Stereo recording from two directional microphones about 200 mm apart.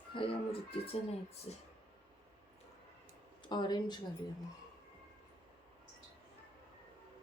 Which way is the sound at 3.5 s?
20° left (ahead or behind).